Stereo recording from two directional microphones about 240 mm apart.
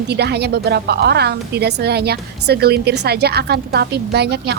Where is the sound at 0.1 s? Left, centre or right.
Right.